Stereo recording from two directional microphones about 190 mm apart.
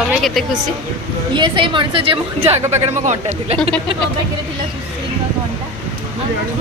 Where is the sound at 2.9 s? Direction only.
40° right (ahead or behind).